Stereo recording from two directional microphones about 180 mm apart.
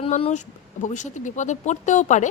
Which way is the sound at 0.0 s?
35° left (ahead or behind).